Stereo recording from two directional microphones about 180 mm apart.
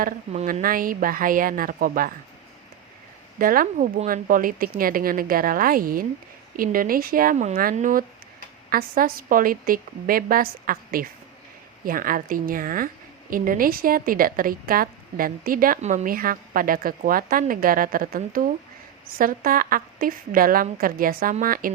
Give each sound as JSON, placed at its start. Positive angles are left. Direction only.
{"t": 0.0, "sound": "a woman's voice", "side_deg": -45}
{"t": 3.3, "sound": "a woman's voice", "side_deg": -50}